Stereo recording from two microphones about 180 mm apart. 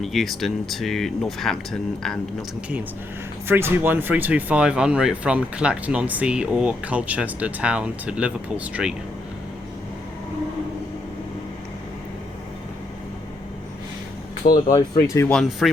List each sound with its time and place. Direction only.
0.0 s speech: centre (ahead or behind)
3.4 s speech: 10° right (ahead or behind)
14.5 s speech: 20° left (ahead or behind)
15.3 s speech: centre (ahead or behind)